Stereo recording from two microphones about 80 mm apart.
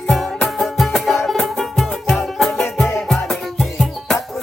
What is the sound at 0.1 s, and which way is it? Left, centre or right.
Music, centre.